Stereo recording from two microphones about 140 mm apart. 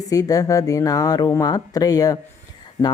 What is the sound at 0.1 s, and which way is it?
Speech, 25° left (ahead or behind).